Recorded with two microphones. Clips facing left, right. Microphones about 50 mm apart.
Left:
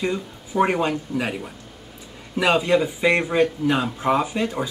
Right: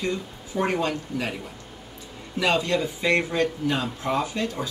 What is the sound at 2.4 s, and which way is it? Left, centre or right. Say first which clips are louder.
Speech: left 4 dB; centre.